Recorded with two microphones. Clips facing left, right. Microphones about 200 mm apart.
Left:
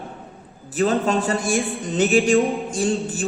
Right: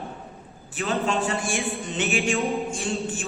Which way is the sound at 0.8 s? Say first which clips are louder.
Left 6 dB; 40° left (ahead or behind).